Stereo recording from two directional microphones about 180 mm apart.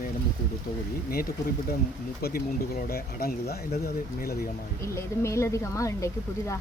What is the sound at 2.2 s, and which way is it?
Speech, 60° left (ahead or behind).